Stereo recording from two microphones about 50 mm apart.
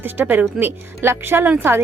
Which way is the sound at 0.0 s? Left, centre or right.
Right.